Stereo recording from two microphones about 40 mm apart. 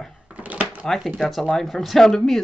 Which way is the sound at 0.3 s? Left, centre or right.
Right.